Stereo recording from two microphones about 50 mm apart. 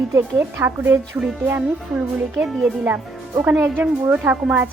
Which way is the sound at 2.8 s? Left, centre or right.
Right.